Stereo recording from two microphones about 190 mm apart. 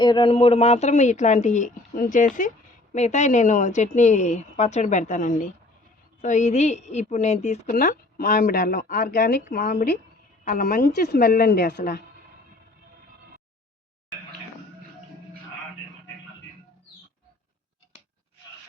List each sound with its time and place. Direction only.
0.0 s a woman's voice: 25° left (ahead or behind); by 12.0 s 55° left (ahead or behind)